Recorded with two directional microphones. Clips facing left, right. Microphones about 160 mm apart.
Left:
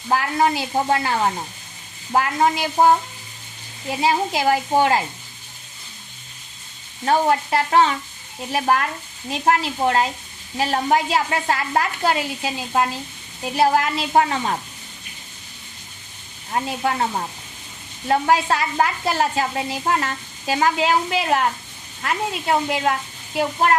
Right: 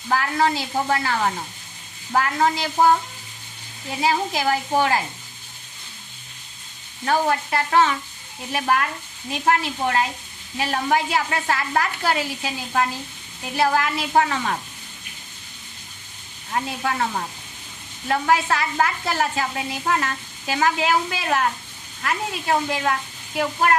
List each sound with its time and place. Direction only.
0.1 s speech: 25° left (ahead or behind)
4.0 s speech: 25° left (ahead or behind)
7.0 s speech: 30° left (ahead or behind)
16.5 s speech: 25° left (ahead or behind)